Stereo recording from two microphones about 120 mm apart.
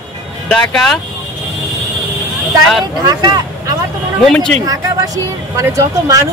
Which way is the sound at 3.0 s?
35° right (ahead or behind).